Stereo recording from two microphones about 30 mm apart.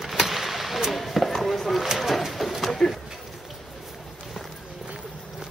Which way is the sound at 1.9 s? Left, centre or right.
Centre.